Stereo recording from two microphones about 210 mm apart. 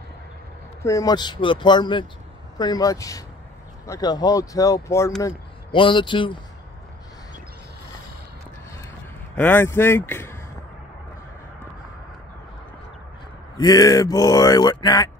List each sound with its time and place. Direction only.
0.8 s speech: 15° left (ahead or behind)
9.3 s speech: 10° left (ahead or behind)
13.6 s speech: 20° left (ahead or behind)